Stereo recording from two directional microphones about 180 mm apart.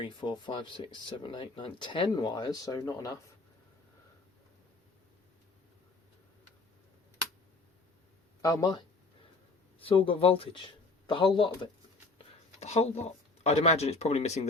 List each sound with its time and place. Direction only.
0.0 s speech: 25° left (ahead or behind)
8.4 s speech: 20° left (ahead or behind)
9.8 s speech: 30° left (ahead or behind)
12.1 s speech: 35° left (ahead or behind)